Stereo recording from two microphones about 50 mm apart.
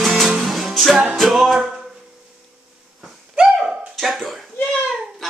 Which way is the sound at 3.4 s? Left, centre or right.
Centre.